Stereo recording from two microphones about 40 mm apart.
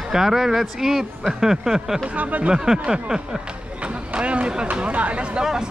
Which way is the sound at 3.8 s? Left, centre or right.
Right.